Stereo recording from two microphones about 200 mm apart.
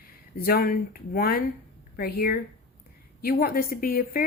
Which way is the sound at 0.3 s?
50° left (ahead or behind).